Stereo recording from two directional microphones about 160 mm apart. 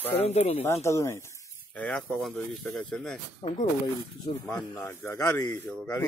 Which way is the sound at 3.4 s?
40° left (ahead or behind).